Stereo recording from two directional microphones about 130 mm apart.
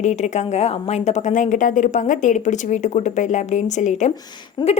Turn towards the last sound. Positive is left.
turn(degrees=35)  # may be behind; listen again after turning